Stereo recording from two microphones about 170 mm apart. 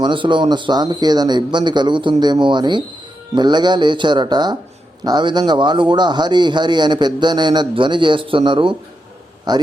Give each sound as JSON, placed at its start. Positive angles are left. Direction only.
{"t": 0.0, "sound": "a man's voice", "side_deg": -30}